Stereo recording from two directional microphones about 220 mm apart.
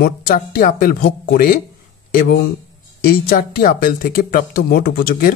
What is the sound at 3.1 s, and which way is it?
Speech, 40° left (ahead or behind).